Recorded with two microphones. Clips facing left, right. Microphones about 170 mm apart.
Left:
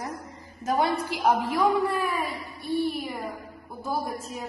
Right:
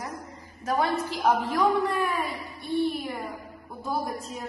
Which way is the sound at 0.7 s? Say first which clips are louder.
Left 1 dB; 20° left (ahead or behind).